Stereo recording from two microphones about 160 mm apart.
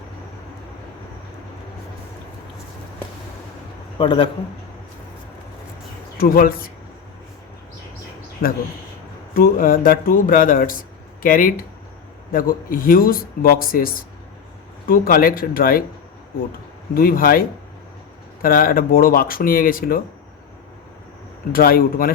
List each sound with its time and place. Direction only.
3.9 s a man's voice: 30° left (ahead or behind)
6.1 s speech: 65° left (ahead or behind)
8.4 s speech: 75° left (ahead or behind)
9.3 s speech: 65° left (ahead or behind)
16.9 s speech: 65° left (ahead or behind)
18.4 s speech: 65° left (ahead or behind)
21.5 s speech: 65° left (ahead or behind)